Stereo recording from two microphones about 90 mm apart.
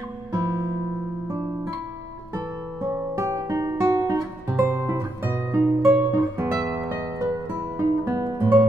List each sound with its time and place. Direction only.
0.4 s music: 35° right (ahead or behind)
2.3 s music: 35° right (ahead or behind)